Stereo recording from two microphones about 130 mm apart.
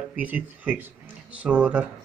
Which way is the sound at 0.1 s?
10° right (ahead or behind).